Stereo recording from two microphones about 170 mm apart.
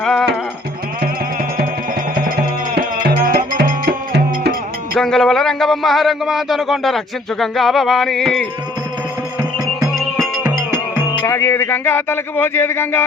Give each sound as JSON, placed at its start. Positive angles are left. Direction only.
{"t": 0.0, "sound": "music", "side_deg": 5}
{"t": 2.1, "sound": "music", "side_deg": -55}
{"t": 4.9, "sound": "a man's voice", "side_deg": 5}
{"t": 10.4, "sound": "music", "side_deg": -15}
{"t": 11.3, "sound": "speech", "side_deg": 15}